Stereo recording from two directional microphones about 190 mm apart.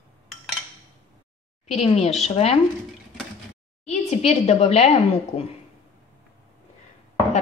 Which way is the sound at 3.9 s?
35° left (ahead or behind).